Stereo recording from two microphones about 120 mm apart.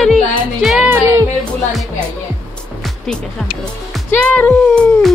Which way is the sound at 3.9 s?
10° left (ahead or behind).